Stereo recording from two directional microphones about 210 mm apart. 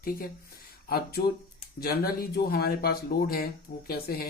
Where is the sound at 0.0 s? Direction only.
45° left (ahead or behind).